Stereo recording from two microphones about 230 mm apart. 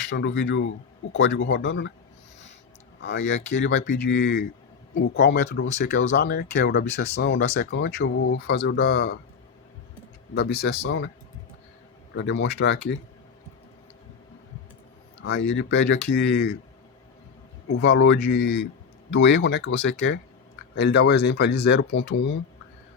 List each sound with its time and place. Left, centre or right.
0.1 s speech: left
3.0 s speech: left
6.2 s speech: left
10.3 s speech: left
12.1 s speech: left
15.2 s speech: left
17.8 s speech: left